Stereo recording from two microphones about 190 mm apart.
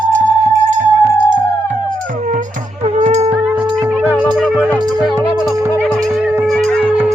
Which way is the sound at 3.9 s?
10° right (ahead or behind).